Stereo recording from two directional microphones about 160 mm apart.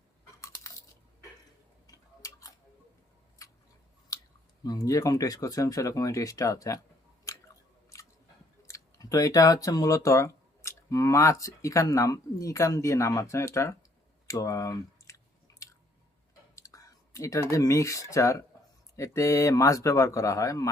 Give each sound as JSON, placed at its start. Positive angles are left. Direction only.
{"t": 0.4, "sound": "a sound", "side_deg": 20}
{"t": 1.9, "sound": "tick-tock", "side_deg": 20}
{"t": 4.1, "sound": "a sound", "side_deg": 20}
{"t": 4.6, "sound": "speech", "side_deg": 25}
{"t": 7.3, "sound": "chewing", "side_deg": 20}
{"t": 8.6, "sound": "speech", "side_deg": 20}
{"t": 14.3, "sound": "chewing", "side_deg": 20}
{"t": 16.6, "sound": "speech", "side_deg": 20}